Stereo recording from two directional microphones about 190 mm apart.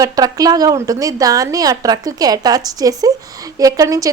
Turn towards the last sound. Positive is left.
turn(degrees=-15)  # may be behind; listen again after turning